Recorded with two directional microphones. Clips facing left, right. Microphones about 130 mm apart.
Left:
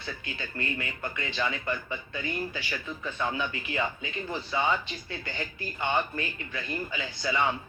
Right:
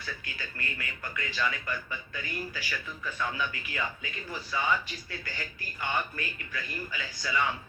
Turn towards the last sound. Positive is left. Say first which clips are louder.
# left 3 dB
turn(degrees=25)  # may be behind; listen again after turning